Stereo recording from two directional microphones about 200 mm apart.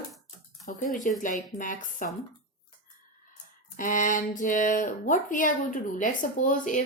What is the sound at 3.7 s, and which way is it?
Speech, 40° left (ahead or behind).